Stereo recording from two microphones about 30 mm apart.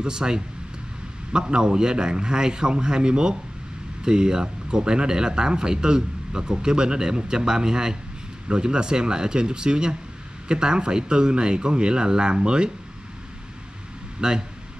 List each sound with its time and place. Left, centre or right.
0.0 s speech: right
14.2 s speech: right